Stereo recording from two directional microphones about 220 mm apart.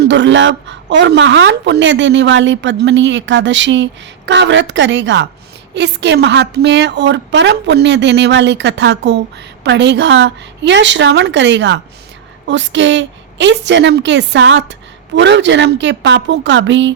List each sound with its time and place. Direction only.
0.0 s a woman's voice: 55° right (ahead or behind)